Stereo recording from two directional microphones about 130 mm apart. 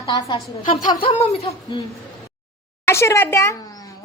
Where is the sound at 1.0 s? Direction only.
50° left (ahead or behind).